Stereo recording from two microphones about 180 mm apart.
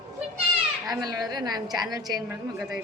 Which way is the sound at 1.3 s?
25° right (ahead or behind).